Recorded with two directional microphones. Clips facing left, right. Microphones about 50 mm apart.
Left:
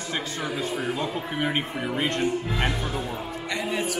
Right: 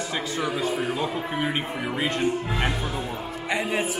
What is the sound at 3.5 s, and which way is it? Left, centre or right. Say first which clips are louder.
Speech: right 3 dB; centre.